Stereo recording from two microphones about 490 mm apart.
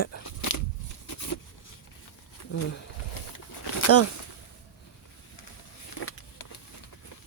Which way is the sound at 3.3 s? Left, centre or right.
Left.